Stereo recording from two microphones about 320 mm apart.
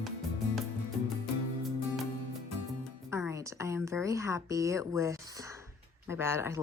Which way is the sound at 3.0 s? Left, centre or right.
Centre.